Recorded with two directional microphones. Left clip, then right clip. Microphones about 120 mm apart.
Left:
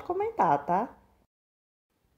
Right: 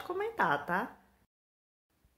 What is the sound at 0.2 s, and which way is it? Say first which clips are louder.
Speech: left 5 dB; 45° left (ahead or behind).